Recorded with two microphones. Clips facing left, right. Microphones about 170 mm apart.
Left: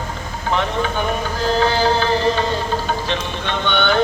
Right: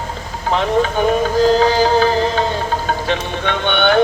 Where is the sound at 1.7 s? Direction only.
40° right (ahead or behind).